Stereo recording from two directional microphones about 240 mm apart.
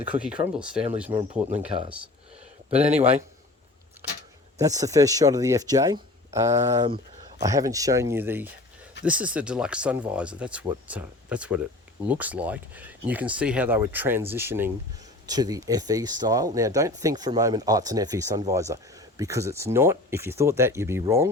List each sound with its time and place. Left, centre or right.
0.0 s speech: centre
1.3 s speech: right
2.9 s speech: centre
4.6 s speech: centre